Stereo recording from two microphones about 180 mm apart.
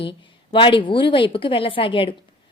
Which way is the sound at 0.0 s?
30° left (ahead or behind).